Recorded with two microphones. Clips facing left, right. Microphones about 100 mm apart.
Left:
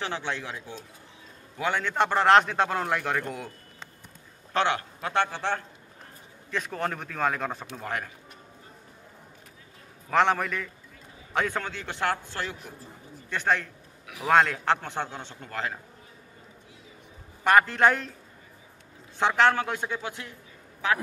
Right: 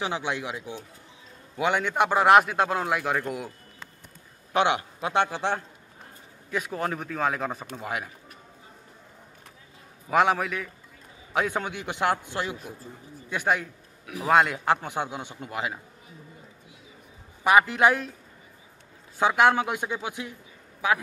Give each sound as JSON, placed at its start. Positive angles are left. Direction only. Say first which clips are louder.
{"t": 0.0, "sound": "a man's voice", "louder": "right 3 dB", "side_deg": -15}
{"t": 4.6, "sound": "a man's voice", "louder": "right 2 dB", "side_deg": -15}
{"t": 6.5, "sound": "speech", "louder": "right 1 dB", "side_deg": -5}
{"t": 10.0, "sound": "a man's voice", "louder": "right 1 dB", "side_deg": -10}
{"t": 17.4, "sound": "a man's voice", "louder": "right 1 dB", "side_deg": -10}
{"t": 19.1, "sound": "a man's voice", "louder": "right 2 dB", "side_deg": -10}